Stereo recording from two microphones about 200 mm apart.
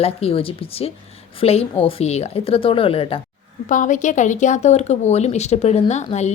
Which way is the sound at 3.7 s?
40° left (ahead or behind).